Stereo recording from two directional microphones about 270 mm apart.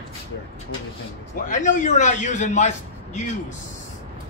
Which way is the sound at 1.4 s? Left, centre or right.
Left.